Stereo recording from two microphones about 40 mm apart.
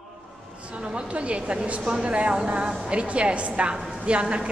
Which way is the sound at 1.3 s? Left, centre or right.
Right.